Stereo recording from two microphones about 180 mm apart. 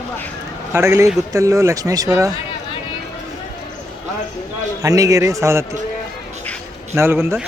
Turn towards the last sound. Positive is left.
turn(degrees=-15)  # may be behind; listen again after turning